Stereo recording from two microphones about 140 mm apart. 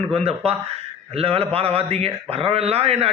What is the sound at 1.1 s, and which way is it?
A man's voice, 45° right (ahead or behind).